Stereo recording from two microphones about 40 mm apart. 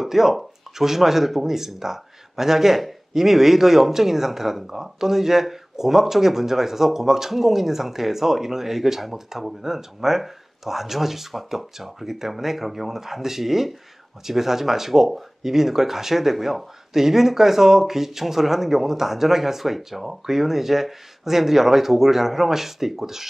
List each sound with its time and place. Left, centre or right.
0.0 s speech: centre